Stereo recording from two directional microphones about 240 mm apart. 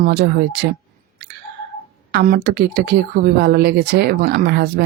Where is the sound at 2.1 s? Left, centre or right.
Right.